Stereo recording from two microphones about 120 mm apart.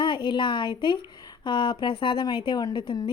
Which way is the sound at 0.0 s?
40° left (ahead or behind).